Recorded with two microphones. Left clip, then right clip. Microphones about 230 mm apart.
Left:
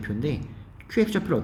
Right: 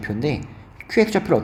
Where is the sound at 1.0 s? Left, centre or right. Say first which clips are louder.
Right 6 dB; left.